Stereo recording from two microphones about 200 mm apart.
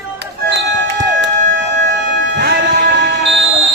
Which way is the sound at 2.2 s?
55° right (ahead or behind).